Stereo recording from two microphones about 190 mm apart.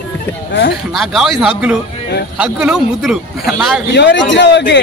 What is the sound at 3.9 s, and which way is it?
Speech, 65° left (ahead or behind).